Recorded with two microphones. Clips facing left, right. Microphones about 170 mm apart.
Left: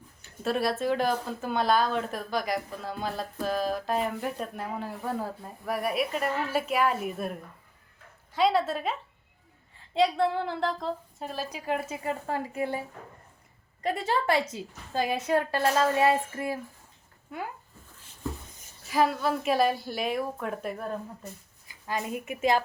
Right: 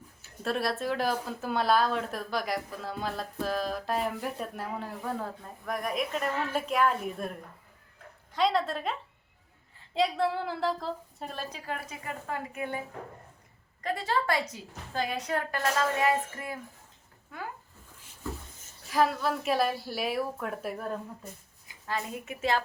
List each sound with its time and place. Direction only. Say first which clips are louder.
0.2 s a woman's voice: left 3 dB; centre (ahead or behind)
8.3 s speech: left 2 dB; 5° left (ahead or behind)
11.5 s a woman's voice: left 7 dB; 20° left (ahead or behind)
13.8 s a woman's voice: left 2 dB; 25° left (ahead or behind)
18.9 s speech: left 1 dB; centre (ahead or behind)
21.8 s a woman's voice: left 3 dB; 15° left (ahead or behind)